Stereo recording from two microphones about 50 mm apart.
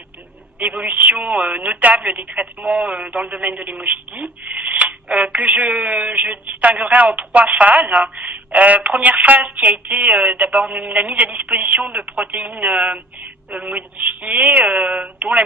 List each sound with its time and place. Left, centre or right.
0.6 s speech: right
2.7 s speech: centre
3.4 s speech: right